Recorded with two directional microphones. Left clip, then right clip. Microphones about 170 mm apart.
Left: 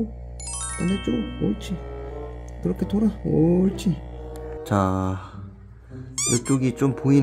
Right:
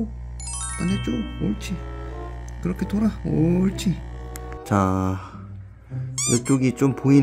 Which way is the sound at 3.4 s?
60° right (ahead or behind).